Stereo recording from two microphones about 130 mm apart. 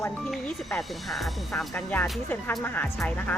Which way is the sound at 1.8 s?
10° left (ahead or behind).